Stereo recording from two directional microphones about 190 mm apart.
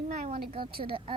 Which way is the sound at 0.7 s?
55° right (ahead or behind).